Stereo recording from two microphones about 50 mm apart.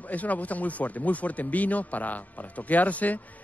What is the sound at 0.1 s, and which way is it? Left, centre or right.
Speech, left.